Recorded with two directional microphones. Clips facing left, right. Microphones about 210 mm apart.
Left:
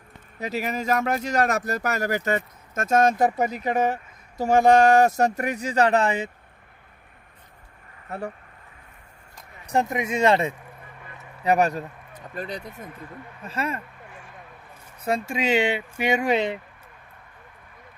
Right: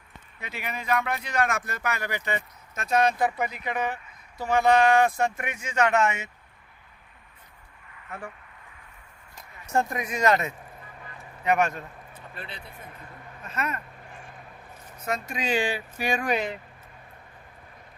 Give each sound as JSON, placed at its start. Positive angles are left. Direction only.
{"t": 0.3, "sound": "speech", "side_deg": 40}
{"t": 8.0, "sound": "speech", "side_deg": 40}
{"t": 9.6, "sound": "speech", "side_deg": 20}
{"t": 13.4, "sound": "speech", "side_deg": 30}
{"t": 15.0, "sound": "speech", "side_deg": 30}